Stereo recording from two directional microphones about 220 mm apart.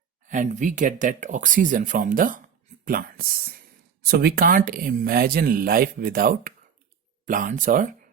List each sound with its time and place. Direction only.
0.3 s speech: 35° right (ahead or behind)